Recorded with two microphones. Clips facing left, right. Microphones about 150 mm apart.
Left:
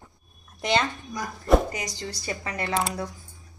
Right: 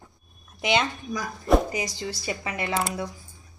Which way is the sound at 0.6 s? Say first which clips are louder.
Even; 5° right (ahead or behind).